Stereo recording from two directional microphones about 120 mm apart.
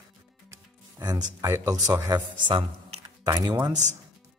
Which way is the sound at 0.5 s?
35° right (ahead or behind).